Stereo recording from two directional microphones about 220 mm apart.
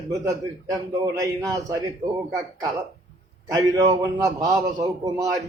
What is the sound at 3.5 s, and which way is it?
A man's voice, 15° right (ahead or behind).